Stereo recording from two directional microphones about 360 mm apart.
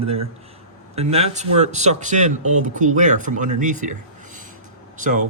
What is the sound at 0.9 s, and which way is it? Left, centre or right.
A man's voice, centre.